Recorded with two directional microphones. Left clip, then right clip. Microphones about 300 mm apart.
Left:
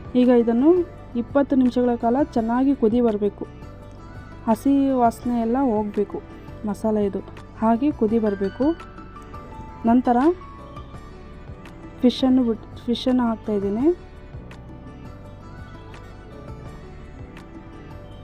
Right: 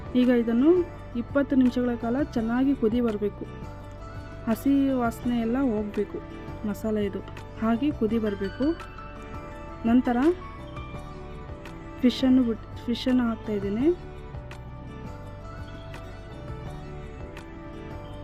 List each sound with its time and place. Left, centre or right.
0.1 s speech: centre
4.4 s speech: centre
9.8 s speech: centre
12.0 s speech: centre